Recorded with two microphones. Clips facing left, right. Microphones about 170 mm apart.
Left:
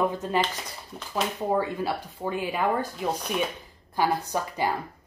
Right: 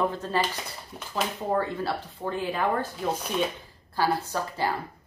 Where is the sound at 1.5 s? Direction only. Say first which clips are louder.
Even; 10° left (ahead or behind).